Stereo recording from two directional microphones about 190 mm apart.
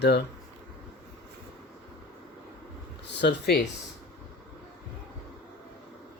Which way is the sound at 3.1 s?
65° left (ahead or behind).